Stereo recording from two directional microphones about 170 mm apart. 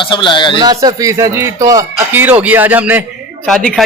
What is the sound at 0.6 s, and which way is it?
Speech, 25° right (ahead or behind).